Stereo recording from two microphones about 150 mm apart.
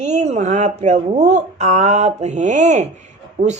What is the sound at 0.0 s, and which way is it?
A woman's voice, 50° right (ahead or behind).